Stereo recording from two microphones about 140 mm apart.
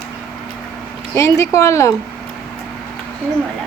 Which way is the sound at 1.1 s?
20° left (ahead or behind).